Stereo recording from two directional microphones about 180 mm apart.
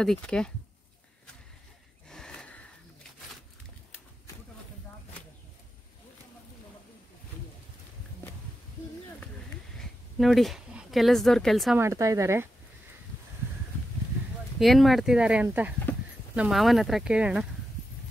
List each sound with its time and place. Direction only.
0.0 s speech: 5° left (ahead or behind)
2.0 s gasp: 5° left (ahead or behind)
9.8 s speech: centre (ahead or behind)
11.8 s speech: 15° right (ahead or behind)
14.6 s speech: centre (ahead or behind)